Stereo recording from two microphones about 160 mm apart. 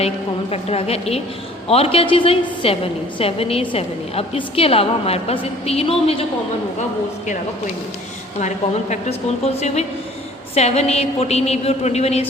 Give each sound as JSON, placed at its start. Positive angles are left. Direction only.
{"t": 0.5, "sound": "a woman's voice", "side_deg": 40}
{"t": 8.4, "sound": "a woman's voice", "side_deg": 45}